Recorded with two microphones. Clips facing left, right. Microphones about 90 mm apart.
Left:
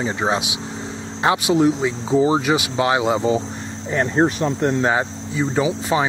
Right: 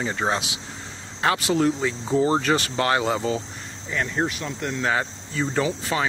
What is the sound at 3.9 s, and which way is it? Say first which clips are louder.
Speech: left 7 dB; 35° left (ahead or behind).